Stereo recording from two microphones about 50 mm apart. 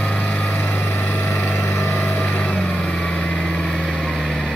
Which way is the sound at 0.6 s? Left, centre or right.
Left.